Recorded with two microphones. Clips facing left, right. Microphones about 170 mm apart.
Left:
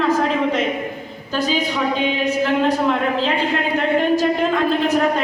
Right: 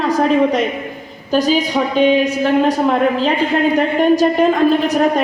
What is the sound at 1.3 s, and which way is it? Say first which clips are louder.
A woman's voice: right 6 dB; 40° right (ahead or behind).